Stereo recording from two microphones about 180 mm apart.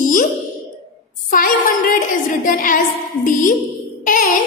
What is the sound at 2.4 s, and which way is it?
A woman's voice, 50° left (ahead or behind).